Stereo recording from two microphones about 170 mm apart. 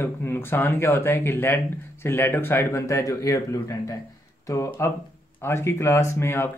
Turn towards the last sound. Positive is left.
turn(degrees=15)  # may be behind; listen again after turning